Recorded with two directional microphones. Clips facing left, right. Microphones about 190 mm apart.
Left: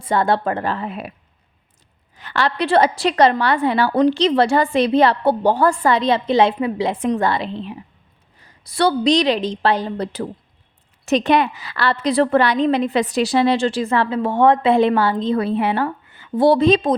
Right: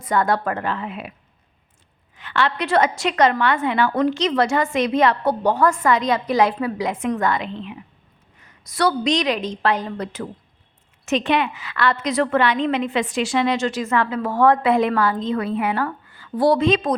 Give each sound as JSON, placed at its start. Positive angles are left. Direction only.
{"t": 0.0, "sound": "a woman's voice", "side_deg": 30}
{"t": 2.1, "sound": "a woman's voice", "side_deg": 40}